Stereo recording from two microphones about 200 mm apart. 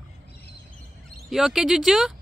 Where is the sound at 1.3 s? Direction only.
Centre (ahead or behind).